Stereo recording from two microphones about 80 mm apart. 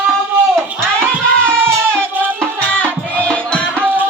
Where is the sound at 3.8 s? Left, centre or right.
Right.